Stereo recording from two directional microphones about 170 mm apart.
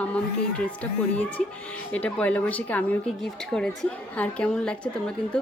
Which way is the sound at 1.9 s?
5° left (ahead or behind).